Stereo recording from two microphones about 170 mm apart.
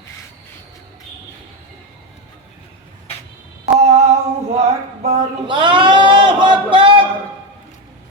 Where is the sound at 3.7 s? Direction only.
40° right (ahead or behind).